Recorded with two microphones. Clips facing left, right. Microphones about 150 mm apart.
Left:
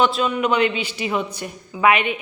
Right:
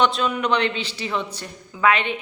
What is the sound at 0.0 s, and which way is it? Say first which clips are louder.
Speech: left 2 dB; 5° left (ahead or behind).